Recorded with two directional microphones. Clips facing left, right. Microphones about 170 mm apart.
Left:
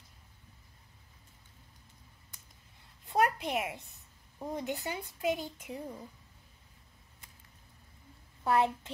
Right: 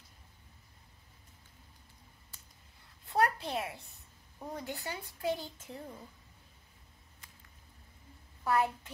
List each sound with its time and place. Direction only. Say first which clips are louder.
3.1 s a woman's voice: left 1 dB; 15° left (ahead or behind)
8.5 s a woman's voice: left 2 dB; 25° left (ahead or behind)